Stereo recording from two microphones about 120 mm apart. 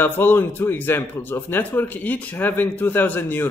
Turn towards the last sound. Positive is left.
turn(degrees=15)  # may be behind; listen again after turning